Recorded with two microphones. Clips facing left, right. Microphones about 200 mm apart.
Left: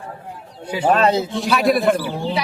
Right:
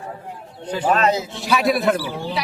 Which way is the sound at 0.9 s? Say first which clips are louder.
Left 3 dB; 30° left (ahead or behind).